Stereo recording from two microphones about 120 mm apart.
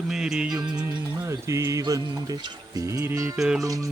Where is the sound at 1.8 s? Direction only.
30° right (ahead or behind).